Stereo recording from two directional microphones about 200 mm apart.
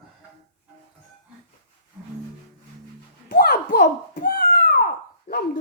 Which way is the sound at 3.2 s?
45° left (ahead or behind).